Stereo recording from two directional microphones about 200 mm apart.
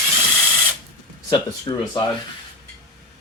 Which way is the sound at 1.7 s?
25° left (ahead or behind).